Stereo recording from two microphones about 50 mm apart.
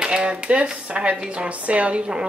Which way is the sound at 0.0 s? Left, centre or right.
Centre.